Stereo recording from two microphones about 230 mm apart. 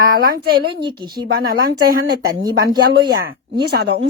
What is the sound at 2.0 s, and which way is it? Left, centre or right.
Speech, right.